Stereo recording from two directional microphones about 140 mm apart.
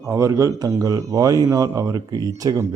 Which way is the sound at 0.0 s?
20° right (ahead or behind).